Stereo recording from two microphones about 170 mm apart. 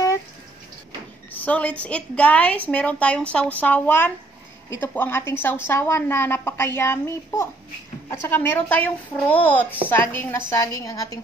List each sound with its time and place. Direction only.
1.4 s a woman's voice: 10° left (ahead or behind)